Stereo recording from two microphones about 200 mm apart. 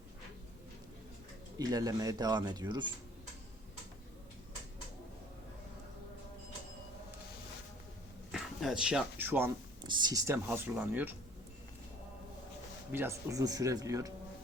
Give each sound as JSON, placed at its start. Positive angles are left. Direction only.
{"t": 1.5, "sound": "speech", "side_deg": -20}
{"t": 8.3, "sound": "speech", "side_deg": 0}
{"t": 9.8, "sound": "speech", "side_deg": -20}
{"t": 12.9, "sound": "speech", "side_deg": -10}